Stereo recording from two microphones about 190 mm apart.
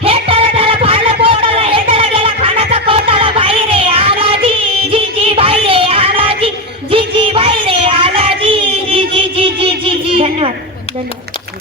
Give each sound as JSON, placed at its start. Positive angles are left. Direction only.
{"t": 0.0, "sound": "music", "side_deg": -30}
{"t": 6.9, "sound": "child singing", "side_deg": -30}